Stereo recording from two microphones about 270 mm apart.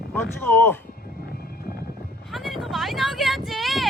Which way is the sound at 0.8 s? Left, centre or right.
Left.